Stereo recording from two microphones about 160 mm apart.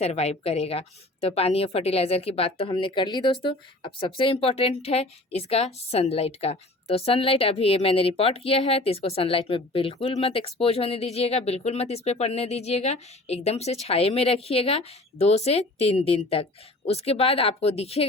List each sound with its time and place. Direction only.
0.0 s speech: 40° left (ahead or behind)